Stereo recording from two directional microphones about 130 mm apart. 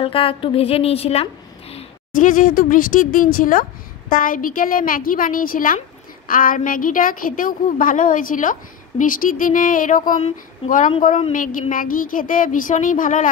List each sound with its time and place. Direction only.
0.0 s a woman's voice: 45° left (ahead or behind)
2.1 s a woman's voice: 90° left